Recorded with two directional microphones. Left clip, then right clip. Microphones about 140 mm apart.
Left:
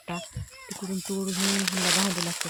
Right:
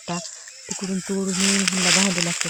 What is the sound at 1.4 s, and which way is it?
Speech, 10° right (ahead or behind).